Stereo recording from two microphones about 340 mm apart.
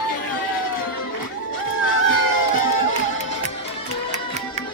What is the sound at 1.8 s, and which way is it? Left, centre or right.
Run, left.